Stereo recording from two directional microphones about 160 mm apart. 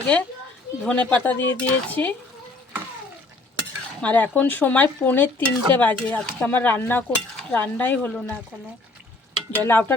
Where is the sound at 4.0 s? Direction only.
10° left (ahead or behind).